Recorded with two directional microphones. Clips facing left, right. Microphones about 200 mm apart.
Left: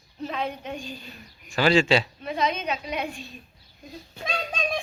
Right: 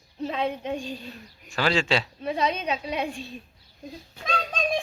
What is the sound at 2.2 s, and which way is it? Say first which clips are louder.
A woman's voice: right 1 dB; 30° right (ahead or behind).